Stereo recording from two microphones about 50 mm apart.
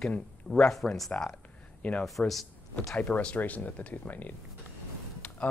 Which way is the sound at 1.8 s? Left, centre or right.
Left.